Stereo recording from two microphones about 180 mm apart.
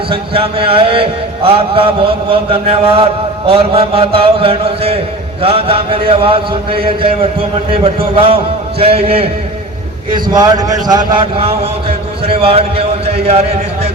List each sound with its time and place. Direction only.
0.1 s chant: 30° right (ahead or behind)
8.1 s chant: 30° right (ahead or behind)
10.3 s speech: 20° right (ahead or behind)
12.3 s chant: 30° right (ahead or behind)